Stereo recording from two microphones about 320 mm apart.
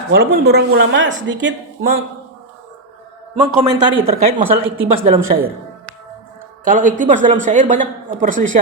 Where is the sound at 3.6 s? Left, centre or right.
Centre.